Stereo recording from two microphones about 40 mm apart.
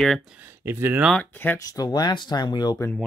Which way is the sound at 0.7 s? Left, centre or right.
Right.